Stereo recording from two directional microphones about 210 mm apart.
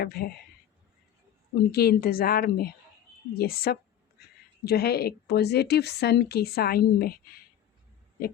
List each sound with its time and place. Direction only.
0.0 s a woman's voice: 45° left (ahead or behind)
1.7 s a woman's voice: 50° left (ahead or behind)